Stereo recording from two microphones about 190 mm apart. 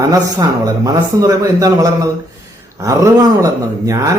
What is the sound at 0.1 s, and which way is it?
A man's voice, 20° right (ahead or behind).